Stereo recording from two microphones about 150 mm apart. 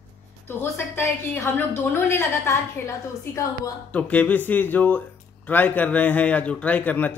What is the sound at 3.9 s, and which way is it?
A man's voice, 10° left (ahead or behind).